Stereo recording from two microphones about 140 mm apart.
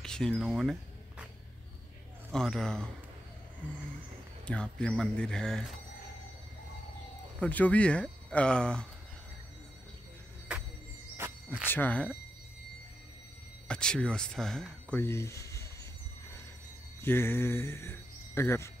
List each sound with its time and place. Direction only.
0.0 s a sound: 5° left (ahead or behind)
2.3 s speech: 5° left (ahead or behind)
4.5 s speech: 5° left (ahead or behind)
7.3 s speech: 10° left (ahead or behind)
10.5 s music: 5° right (ahead or behind)
11.1 s cricket: 15° right (ahead or behind)
11.6 s speech: 15° left (ahead or behind)
13.7 s speech: 5° left (ahead or behind)
15.0 s speech: 20° left (ahead or behind)
17.0 s speech: 15° left (ahead or behind)